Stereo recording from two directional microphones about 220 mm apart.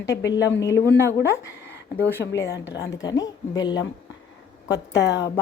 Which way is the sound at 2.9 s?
15° left (ahead or behind).